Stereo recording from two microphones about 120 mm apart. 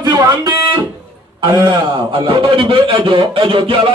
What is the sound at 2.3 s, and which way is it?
Speech, 45° right (ahead or behind).